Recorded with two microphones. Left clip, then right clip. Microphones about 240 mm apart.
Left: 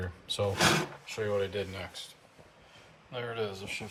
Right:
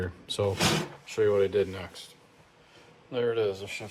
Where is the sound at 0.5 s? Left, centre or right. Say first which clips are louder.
Left 5 dB; centre.